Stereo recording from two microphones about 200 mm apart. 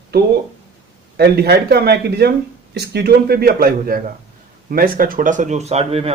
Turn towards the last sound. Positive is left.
turn(degrees=-30)  # may be behind; listen again after turning